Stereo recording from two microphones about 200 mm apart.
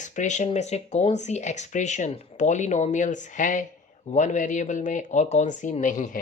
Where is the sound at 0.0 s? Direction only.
35° left (ahead or behind).